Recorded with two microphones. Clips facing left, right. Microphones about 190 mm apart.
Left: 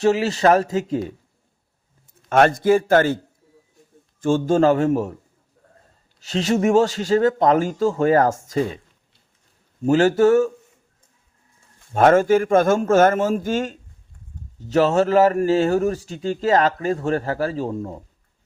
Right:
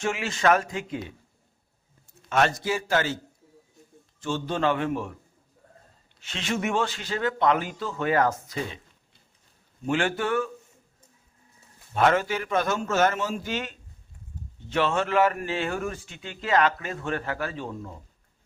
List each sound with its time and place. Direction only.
0.0 s a man's voice: 35° left (ahead or behind)
2.3 s a man's voice: 50° left (ahead or behind)
4.2 s a man's voice: 50° left (ahead or behind)
6.1 s a man's voice: 40° left (ahead or behind)
9.8 s a man's voice: 40° left (ahead or behind)
11.9 s a man's voice: 45° left (ahead or behind)